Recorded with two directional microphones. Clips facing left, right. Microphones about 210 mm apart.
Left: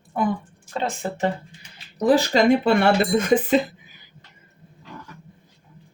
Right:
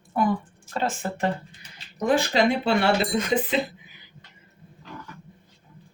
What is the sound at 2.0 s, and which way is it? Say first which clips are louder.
Speech: left 4 dB; 40° left (ahead or behind).